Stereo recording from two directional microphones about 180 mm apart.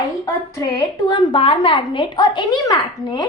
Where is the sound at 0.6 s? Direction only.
20° left (ahead or behind).